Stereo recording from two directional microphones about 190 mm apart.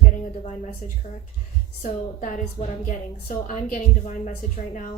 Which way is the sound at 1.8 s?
40° left (ahead or behind).